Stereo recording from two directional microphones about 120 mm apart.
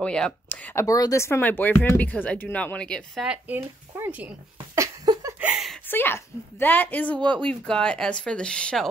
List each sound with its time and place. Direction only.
0.0 s speech: 10° left (ahead or behind)
0.8 s speech: 30° left (ahead or behind); by 3.3 s 5° left (ahead or behind)
3.3 s speech: 15° right (ahead or behind)
4.7 s a sound: 30° right (ahead or behind)
5.4 s a sound: 5° right (ahead or behind)
5.9 s speech: 15° left (ahead or behind)